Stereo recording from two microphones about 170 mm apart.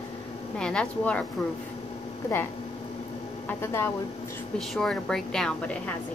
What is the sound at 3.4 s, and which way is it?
Speech, 15° left (ahead or behind).